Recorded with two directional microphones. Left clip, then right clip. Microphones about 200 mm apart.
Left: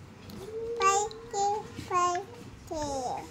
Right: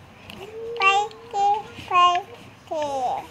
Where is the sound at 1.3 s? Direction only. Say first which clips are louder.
Right 8 dB; 30° left (ahead or behind).